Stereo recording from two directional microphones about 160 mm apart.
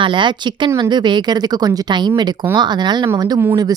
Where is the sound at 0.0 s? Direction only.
30° right (ahead or behind).